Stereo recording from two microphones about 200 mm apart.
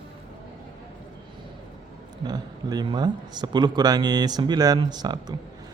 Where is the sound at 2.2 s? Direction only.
20° right (ahead or behind).